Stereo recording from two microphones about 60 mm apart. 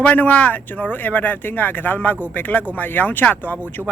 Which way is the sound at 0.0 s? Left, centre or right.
Left.